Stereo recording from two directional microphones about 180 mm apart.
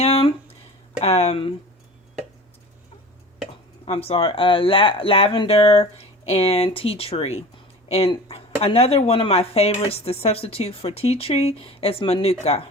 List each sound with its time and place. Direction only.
0.0 s a sound: 35° left (ahead or behind)
1.0 s speech: 35° left (ahead or behind)
3.8 s speech: 35° left (ahead or behind)